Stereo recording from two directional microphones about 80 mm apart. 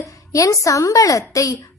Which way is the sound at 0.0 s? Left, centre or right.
Left.